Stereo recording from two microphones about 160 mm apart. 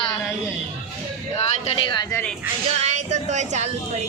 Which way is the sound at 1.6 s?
30° left (ahead or behind).